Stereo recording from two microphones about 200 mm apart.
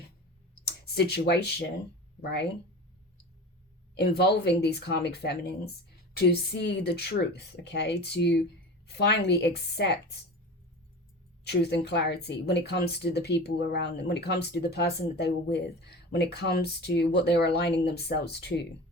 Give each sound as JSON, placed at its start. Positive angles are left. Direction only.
{"t": 0.9, "sound": "speech", "side_deg": 55}
{"t": 3.9, "sound": "speech", "side_deg": 55}
{"t": 11.4, "sound": "speech", "side_deg": 55}